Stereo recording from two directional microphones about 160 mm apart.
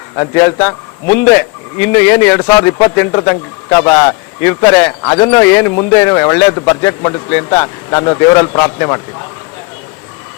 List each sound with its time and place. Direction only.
0.2 s speech: 20° left (ahead or behind)
5.5 s speech: 15° left (ahead or behind)